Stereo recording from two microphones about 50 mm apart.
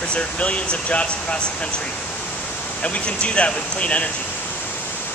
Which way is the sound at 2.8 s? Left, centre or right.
Left.